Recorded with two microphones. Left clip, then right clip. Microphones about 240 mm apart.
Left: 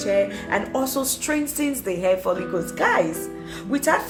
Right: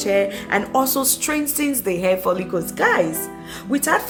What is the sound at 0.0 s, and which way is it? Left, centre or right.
Speech, right.